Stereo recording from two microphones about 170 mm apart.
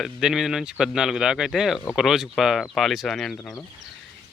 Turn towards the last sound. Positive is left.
turn(degrees=0)  # may be behind; listen again after turning